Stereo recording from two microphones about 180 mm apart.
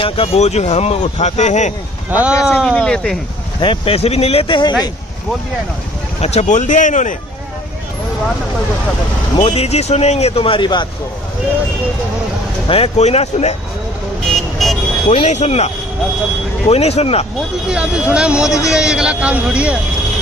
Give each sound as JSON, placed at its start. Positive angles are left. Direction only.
{"t": 0.0, "sound": "speech", "side_deg": 30}
{"t": 2.0, "sound": "speech", "side_deg": -10}
{"t": 3.6, "sound": "speech", "side_deg": 30}
{"t": 6.2, "sound": "speech", "side_deg": 40}
{"t": 9.4, "sound": "speech", "side_deg": 35}
{"t": 12.6, "sound": "speech", "side_deg": 30}
{"t": 14.2, "sound": "vehicle", "side_deg": 0}
{"t": 15.0, "sound": "speech", "side_deg": 40}
{"t": 17.6, "sound": "speech", "side_deg": -5}